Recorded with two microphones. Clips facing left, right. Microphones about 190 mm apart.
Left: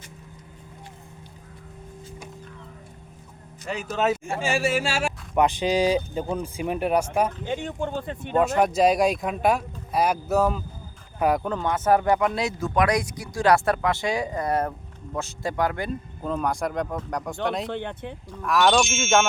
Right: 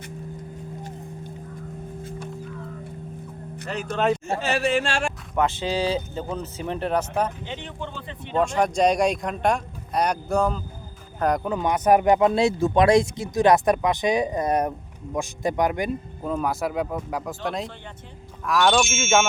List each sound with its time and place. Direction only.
3.7 s speech: 5° left (ahead or behind)
5.3 s speech: 15° left (ahead or behind)
7.4 s speech: 45° left (ahead or behind)
8.4 s speech: 5° left (ahead or behind)
11.4 s speech: 10° right (ahead or behind)
16.2 s speech: 5° right (ahead or behind)
17.7 s speech: 65° left (ahead or behind)
18.4 s speech: centre (ahead or behind)